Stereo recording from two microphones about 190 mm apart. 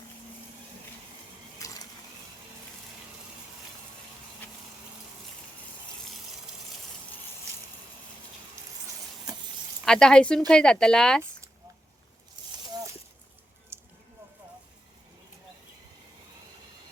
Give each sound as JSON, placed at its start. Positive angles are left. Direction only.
{"t": 1.5, "sound": "water", "side_deg": 20}
{"t": 9.8, "sound": "speech", "side_deg": 5}
{"t": 13.7, "sound": "a sound", "side_deg": -10}